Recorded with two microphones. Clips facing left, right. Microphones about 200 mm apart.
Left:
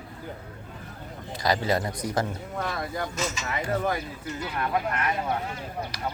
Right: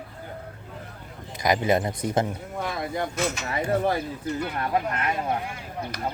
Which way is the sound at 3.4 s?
30° right (ahead or behind).